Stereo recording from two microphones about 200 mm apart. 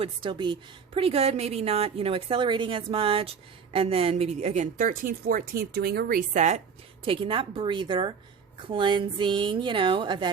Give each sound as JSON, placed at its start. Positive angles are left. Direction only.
{"t": 0.0, "sound": "a woman's voice", "side_deg": -25}
{"t": 7.0, "sound": "a woman's voice", "side_deg": -25}